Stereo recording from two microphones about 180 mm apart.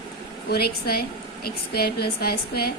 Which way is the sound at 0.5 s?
60° left (ahead or behind).